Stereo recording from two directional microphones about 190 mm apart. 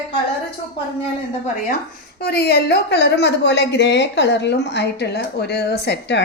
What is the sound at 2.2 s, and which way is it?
A woman's voice, 55° left (ahead or behind).